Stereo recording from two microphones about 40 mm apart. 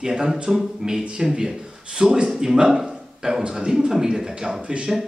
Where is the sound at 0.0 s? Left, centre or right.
Centre.